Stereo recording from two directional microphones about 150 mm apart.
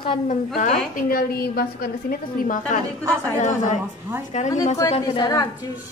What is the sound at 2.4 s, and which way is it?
A woman's voice, 60° left (ahead or behind).